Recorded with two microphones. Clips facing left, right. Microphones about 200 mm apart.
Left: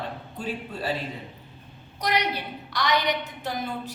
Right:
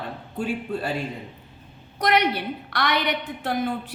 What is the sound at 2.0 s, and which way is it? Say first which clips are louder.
A woman's voice: right 5 dB; 55° right (ahead or behind).